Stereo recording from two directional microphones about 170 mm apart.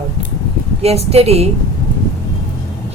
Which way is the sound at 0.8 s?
35° right (ahead or behind).